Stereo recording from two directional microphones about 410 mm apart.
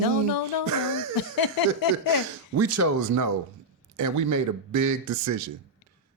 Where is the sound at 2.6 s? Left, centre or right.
Right.